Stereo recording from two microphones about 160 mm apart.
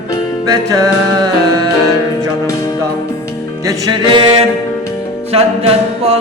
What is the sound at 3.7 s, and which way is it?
Music, 25° right (ahead or behind).